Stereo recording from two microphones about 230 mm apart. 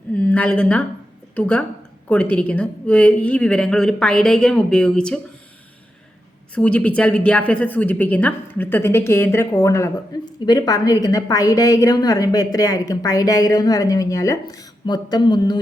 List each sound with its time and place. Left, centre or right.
0.1 s a sound: centre
1.4 s speech: centre
6.5 s speech: centre